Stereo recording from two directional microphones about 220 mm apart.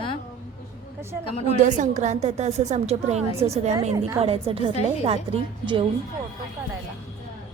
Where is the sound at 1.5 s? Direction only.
35° right (ahead or behind).